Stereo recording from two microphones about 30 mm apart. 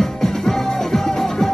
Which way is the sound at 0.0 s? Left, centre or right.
Centre.